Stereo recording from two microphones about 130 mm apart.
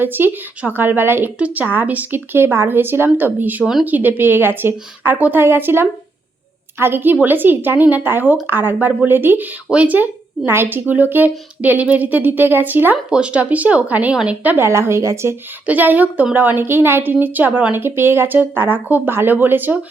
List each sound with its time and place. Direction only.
0.0 s a woman's voice: 15° right (ahead or behind)